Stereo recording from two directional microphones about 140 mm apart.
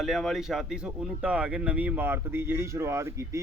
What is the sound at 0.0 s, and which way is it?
A man's voice, centre (ahead or behind).